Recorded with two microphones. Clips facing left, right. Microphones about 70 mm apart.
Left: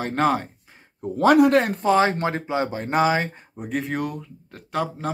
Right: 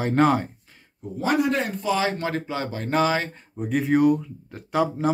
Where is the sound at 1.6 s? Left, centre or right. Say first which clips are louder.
Left 4 dB; left.